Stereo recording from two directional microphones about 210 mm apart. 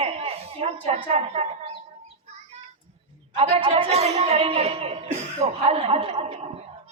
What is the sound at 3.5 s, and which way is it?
A woman's voice, 30° right (ahead or behind).